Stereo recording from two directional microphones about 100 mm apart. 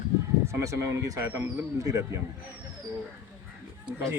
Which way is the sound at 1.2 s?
20° right (ahead or behind).